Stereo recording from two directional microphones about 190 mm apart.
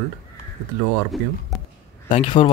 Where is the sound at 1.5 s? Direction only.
Centre (ahead or behind).